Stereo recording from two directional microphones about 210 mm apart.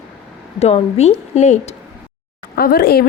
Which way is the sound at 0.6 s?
30° left (ahead or behind).